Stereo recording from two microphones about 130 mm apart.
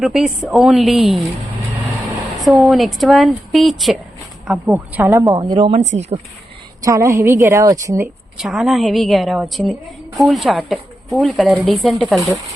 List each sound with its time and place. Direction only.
0.0 s a woman's voice: 5° right (ahead or behind)
2.4 s a woman's voice: centre (ahead or behind)
4.5 s speech: 15° right (ahead or behind)
5.3 s speech: 40° right (ahead or behind)
5.8 s speech: 60° right (ahead or behind)
6.8 s a woman's voice: 25° right (ahead or behind)
8.4 s a woman's voice: 5° right (ahead or behind)